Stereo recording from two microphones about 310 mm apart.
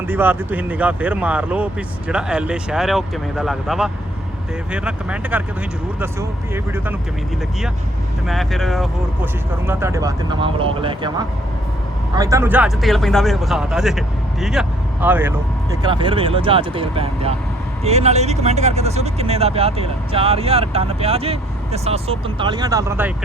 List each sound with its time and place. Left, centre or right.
0.1 s speech: centre
8.3 s speech: centre